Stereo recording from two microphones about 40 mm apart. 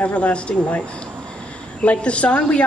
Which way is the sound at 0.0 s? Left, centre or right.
Left.